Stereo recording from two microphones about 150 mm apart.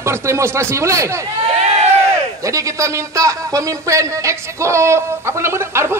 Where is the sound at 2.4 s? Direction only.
20° right (ahead or behind).